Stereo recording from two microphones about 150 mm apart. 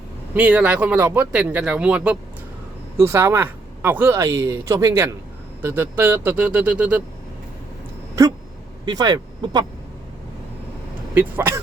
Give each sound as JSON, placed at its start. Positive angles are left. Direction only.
{"t": 0.3, "sound": "speech", "side_deg": -10}
{"t": 8.8, "sound": "speech", "side_deg": -25}
{"t": 11.1, "sound": "speech", "side_deg": -15}